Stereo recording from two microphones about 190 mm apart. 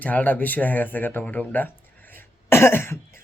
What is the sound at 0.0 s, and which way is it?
A man's voice, 10° left (ahead or behind).